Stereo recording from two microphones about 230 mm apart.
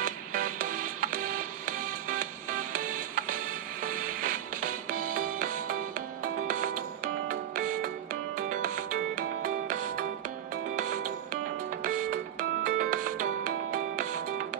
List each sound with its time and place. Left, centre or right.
0.0 s music: right
2.8 s music: right
5.1 s music: right